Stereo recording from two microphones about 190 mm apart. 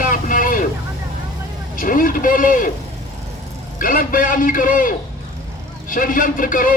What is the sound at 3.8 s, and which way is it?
A man's voice, 45° left (ahead or behind).